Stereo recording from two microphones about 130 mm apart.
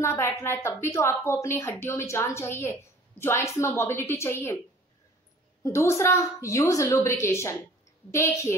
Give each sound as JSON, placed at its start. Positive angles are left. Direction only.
{"t": 0.0, "sound": "a woman's voice", "side_deg": 20}
{"t": 5.6, "sound": "a woman's voice", "side_deg": 20}